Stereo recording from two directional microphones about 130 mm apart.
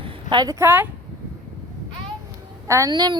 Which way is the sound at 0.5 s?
15° right (ahead or behind).